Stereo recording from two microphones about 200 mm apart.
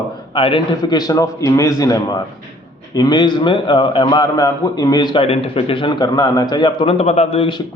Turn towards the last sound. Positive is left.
turn(degrees=30)  # may be behind; listen again after turning